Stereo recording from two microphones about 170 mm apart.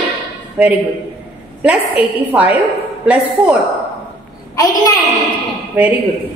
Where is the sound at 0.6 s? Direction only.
10° right (ahead or behind).